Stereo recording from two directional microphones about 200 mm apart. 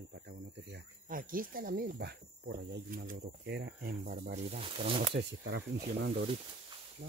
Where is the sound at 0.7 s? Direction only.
45° right (ahead or behind).